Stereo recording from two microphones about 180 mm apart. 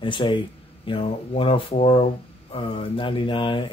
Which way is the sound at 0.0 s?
30° left (ahead or behind).